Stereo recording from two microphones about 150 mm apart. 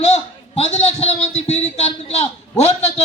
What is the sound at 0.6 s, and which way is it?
A man's voice, 45° left (ahead or behind).